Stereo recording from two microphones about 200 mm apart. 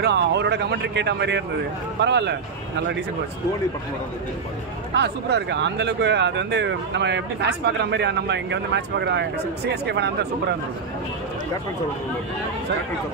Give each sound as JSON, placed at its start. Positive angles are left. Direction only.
{"t": 0.0, "sound": "speech", "side_deg": -55}
{"t": 4.9, "sound": "speech", "side_deg": -60}